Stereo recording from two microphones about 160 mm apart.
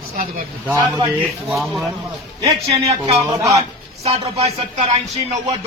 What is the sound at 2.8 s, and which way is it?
A man's voice, 40° right (ahead or behind).